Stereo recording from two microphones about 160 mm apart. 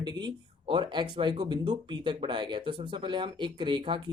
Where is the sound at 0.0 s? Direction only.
25° right (ahead or behind).